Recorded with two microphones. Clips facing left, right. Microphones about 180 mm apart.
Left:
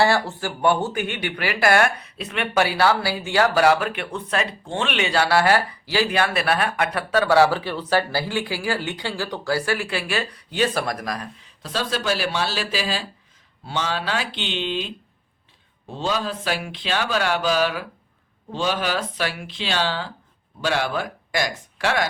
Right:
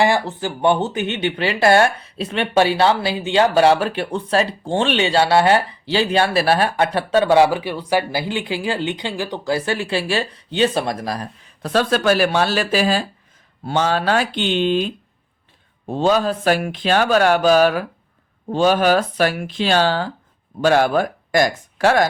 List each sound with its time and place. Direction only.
0.0 s speech: 20° right (ahead or behind)
11.6 s speech: 55° right (ahead or behind)